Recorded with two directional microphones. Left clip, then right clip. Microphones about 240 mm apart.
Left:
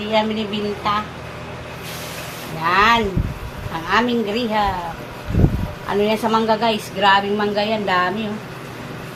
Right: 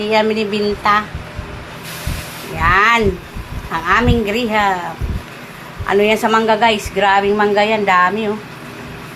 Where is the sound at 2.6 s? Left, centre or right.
Right.